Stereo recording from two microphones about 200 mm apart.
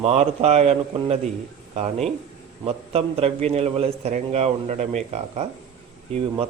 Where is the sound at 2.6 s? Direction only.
30° right (ahead or behind).